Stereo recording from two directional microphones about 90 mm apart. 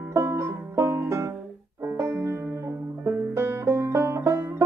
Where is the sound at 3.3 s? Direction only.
30° right (ahead or behind).